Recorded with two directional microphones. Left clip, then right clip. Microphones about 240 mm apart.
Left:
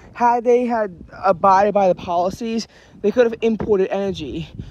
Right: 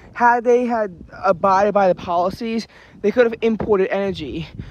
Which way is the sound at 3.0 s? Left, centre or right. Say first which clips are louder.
Even; centre.